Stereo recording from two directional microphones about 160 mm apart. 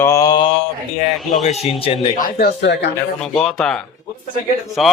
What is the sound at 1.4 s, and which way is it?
Speech, 40° left (ahead or behind).